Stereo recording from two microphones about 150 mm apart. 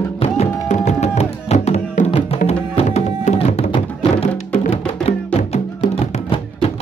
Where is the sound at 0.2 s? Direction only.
50° left (ahead or behind).